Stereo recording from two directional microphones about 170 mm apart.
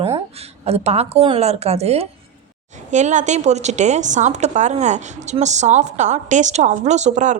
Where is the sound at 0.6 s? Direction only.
40° right (ahead or behind).